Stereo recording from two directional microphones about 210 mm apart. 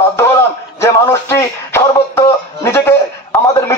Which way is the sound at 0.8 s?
10° left (ahead or behind).